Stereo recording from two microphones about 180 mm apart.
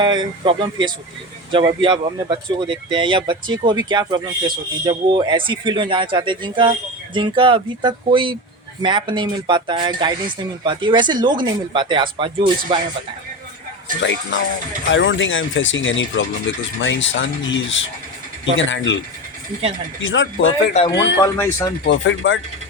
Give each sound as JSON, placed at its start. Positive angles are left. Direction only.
{"t": 0.0, "sound": "speech", "side_deg": -25}
{"t": 14.0, "sound": "speech", "side_deg": 90}
{"t": 20.0, "sound": "speech", "side_deg": 90}
{"t": 20.9, "sound": "speech", "side_deg": 75}
{"t": 21.2, "sound": "speech", "side_deg": 15}
{"t": 21.8, "sound": "speech", "side_deg": 90}